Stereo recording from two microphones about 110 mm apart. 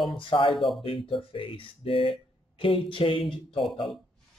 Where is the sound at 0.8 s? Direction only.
55° left (ahead or behind).